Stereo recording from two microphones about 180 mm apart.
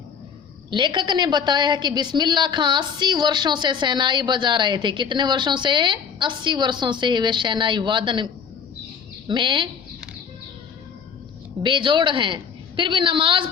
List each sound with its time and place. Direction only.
0.7 s a woman's voice: 25° right (ahead or behind)
11.6 s a woman's voice: 25° right (ahead or behind)